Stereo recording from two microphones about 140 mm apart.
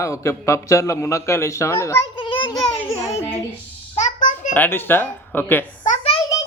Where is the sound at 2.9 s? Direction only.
20° left (ahead or behind).